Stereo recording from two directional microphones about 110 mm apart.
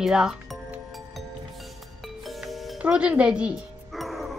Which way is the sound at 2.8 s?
10° right (ahead or behind).